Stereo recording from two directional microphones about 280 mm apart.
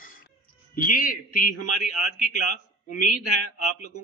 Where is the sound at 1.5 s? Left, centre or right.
Left.